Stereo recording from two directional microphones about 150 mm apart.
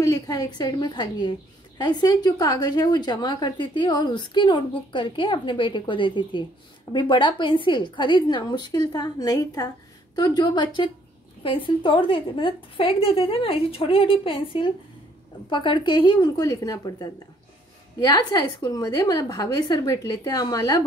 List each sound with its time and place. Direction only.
0.0 s a woman's voice: 25° left (ahead or behind)